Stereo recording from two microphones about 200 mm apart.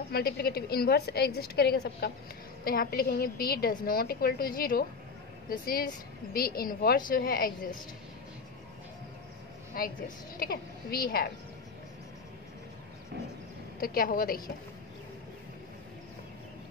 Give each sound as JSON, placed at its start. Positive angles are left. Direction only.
{"t": 0.1, "sound": "a woman's voice", "side_deg": 50}
{"t": 9.8, "sound": "a woman's voice", "side_deg": 45}
{"t": 13.7, "sound": "a woman's voice", "side_deg": 45}